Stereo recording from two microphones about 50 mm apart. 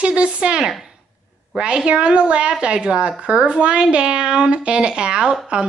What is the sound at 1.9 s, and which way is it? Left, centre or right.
Speech, right.